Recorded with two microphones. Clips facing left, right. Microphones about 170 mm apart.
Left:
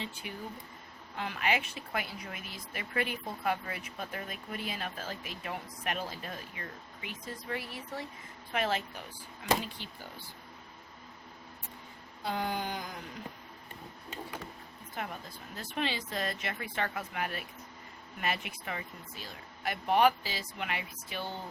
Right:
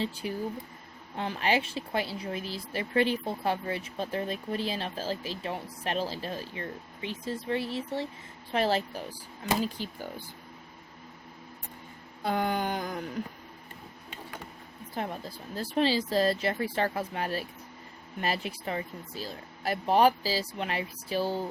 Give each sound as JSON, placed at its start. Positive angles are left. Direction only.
{"t": 0.0, "sound": "speech", "side_deg": -35}
{"t": 12.2, "sound": "a sound", "side_deg": -55}
{"t": 14.9, "sound": "speech", "side_deg": -35}